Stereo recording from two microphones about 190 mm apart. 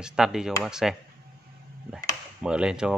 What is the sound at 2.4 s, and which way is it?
Speech, 5° right (ahead or behind).